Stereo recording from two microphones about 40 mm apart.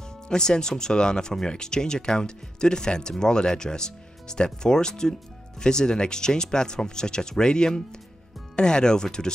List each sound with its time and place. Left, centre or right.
0.3 s speech: centre